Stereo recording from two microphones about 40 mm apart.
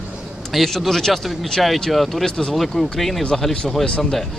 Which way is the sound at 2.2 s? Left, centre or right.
Centre.